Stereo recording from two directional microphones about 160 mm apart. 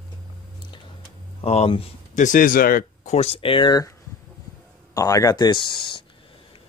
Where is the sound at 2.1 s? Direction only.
55° left (ahead or behind); by 3.9 s 25° left (ahead or behind).